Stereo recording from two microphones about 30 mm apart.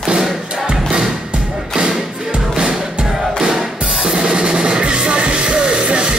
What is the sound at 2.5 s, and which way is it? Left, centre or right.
Music, right.